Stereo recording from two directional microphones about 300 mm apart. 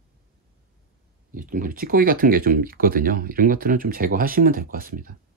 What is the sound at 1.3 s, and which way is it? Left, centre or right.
Speech, right.